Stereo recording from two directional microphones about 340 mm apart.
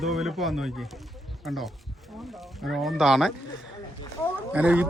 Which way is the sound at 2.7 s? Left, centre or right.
Centre.